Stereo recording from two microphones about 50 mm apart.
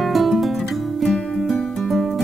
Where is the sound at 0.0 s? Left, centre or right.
Centre.